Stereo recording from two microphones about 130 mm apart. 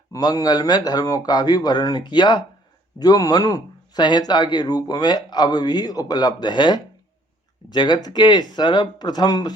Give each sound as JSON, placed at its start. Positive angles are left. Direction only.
{"t": 0.1, "sound": "speech", "side_deg": 30}